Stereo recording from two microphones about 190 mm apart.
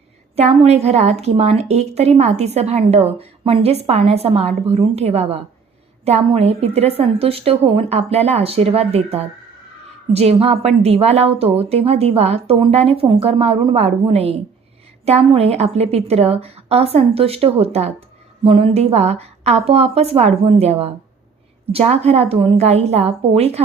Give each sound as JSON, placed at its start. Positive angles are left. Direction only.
{"t": 0.3, "sound": "a woman's voice", "side_deg": -35}